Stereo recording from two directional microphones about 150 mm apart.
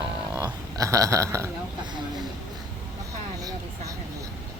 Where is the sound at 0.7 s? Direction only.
20° right (ahead or behind).